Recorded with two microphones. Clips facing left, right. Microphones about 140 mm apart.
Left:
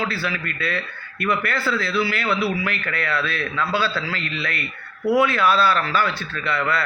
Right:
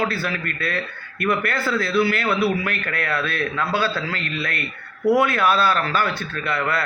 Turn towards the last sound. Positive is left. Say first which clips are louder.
# even
turn(degrees=-50)  # may be behind; listen again after turning